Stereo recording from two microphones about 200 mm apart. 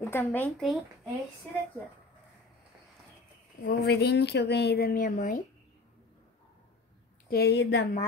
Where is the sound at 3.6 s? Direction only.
55° left (ahead or behind).